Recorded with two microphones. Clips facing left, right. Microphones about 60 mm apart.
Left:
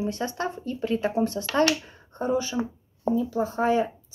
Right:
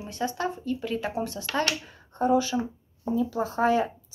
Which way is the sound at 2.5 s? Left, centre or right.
Centre.